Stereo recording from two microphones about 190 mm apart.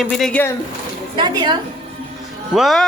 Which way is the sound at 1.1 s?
25° right (ahead or behind).